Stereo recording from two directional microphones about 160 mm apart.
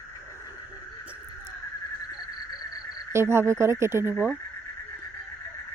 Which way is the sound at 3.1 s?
15° right (ahead or behind).